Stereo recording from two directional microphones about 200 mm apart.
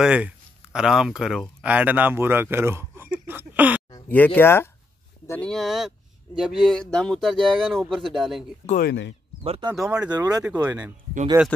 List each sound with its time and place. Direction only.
0.0 s speech: 5° right (ahead or behind)
3.9 s speech: 10° left (ahead or behind)
5.5 s speech: centre (ahead or behind)
8.6 s speech: 50° left (ahead or behind)
9.4 s speech: 25° right (ahead or behind)
9.8 s speech: 5° right (ahead or behind)
10.1 s speech: 15° right (ahead or behind)